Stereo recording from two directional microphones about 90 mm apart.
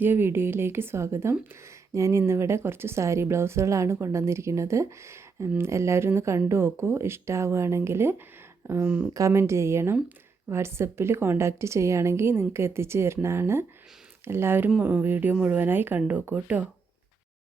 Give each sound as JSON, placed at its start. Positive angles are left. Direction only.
{"t": 0.0, "sound": "a woman's voice", "side_deg": -25}
{"t": 8.9, "sound": "speech", "side_deg": -15}
{"t": 9.1, "sound": "a woman's voice", "side_deg": -35}
{"t": 14.7, "sound": "speech", "side_deg": -10}
{"t": 15.0, "sound": "a woman's voice", "side_deg": -20}